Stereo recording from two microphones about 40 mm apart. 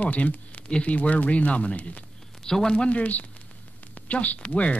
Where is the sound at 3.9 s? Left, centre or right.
Left.